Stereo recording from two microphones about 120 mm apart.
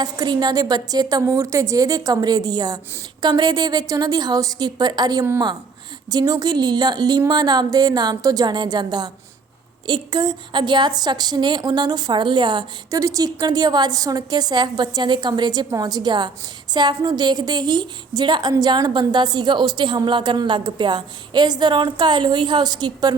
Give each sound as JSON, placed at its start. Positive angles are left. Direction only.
{"t": 0.0, "sound": "a woman's voice", "side_deg": -35}
{"t": 13.0, "sound": "a woman's voice", "side_deg": -30}